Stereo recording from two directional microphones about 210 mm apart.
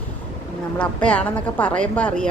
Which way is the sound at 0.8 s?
5° left (ahead or behind).